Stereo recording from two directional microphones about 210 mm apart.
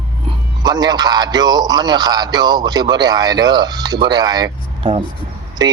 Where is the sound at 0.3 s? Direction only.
20° right (ahead or behind).